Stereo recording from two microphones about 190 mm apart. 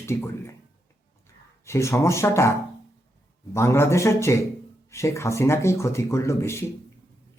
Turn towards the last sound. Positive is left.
turn(degrees=15)  # may be behind; listen again after turning